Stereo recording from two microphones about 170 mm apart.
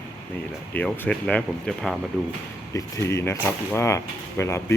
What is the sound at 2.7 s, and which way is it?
Speech, 15° left (ahead or behind).